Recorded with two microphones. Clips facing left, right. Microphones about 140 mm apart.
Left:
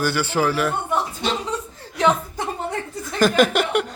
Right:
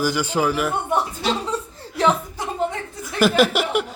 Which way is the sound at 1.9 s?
Centre (ahead or behind).